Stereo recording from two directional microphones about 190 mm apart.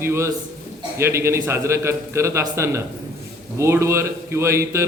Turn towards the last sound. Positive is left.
turn(degrees=-15)  # may be behind; listen again after turning